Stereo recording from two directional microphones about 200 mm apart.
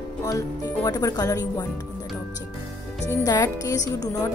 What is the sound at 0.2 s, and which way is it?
Speech, 15° left (ahead or behind).